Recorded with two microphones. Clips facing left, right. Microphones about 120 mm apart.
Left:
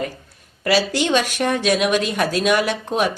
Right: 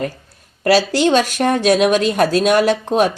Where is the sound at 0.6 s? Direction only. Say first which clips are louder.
Right 5 dB; 35° right (ahead or behind).